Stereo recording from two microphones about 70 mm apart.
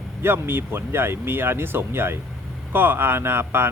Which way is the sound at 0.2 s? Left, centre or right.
Right.